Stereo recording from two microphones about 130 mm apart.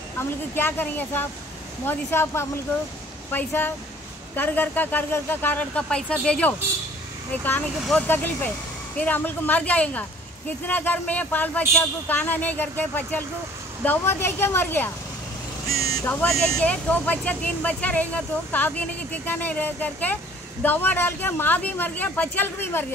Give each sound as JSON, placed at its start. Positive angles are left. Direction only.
{"t": 0.2, "sound": "speech", "side_deg": 15}
{"t": 15.8, "sound": "vehicle", "side_deg": 25}
{"t": 16.1, "sound": "speech", "side_deg": 5}